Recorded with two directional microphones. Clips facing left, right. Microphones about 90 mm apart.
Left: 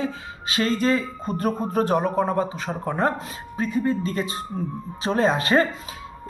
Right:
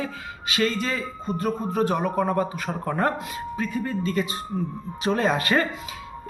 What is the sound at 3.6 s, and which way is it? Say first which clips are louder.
Speech: left 5 dB; 35° left (ahead or behind).